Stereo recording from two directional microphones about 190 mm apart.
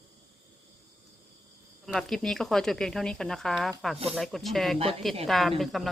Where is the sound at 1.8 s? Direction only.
Centre (ahead or behind).